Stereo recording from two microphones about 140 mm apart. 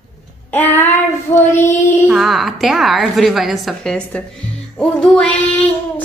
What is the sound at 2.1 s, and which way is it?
A woman's voice, centre (ahead or behind).